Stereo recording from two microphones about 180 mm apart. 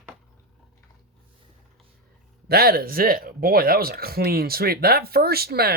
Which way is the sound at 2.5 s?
60° right (ahead or behind).